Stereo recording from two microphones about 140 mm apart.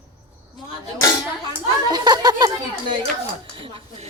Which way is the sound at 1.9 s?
30° right (ahead or behind).